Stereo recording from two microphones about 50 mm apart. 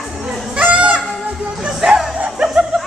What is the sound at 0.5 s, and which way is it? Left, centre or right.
Honk, right.